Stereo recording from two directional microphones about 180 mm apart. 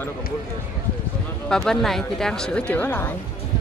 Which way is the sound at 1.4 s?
5° left (ahead or behind).